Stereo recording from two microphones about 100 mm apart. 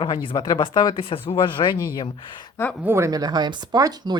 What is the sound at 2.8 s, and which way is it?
Speech, 25° right (ahead or behind).